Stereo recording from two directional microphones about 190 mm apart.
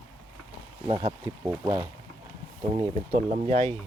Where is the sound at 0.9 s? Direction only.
25° right (ahead or behind).